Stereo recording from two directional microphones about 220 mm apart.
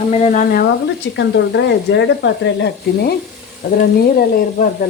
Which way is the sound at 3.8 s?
40° left (ahead or behind).